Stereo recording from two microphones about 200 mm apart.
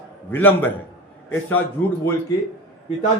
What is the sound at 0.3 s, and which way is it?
A man's voice, 10° left (ahead or behind).